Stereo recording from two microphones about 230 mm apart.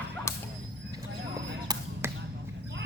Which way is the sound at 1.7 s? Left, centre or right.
Centre.